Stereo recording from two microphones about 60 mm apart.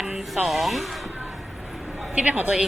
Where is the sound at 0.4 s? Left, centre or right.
Centre.